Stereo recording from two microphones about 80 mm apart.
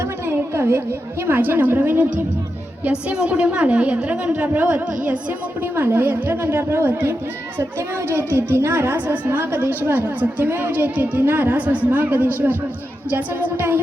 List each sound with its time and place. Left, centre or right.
0.3 s a sound: right
1.3 s a woman's voice: right
2.8 s a woman's voice: centre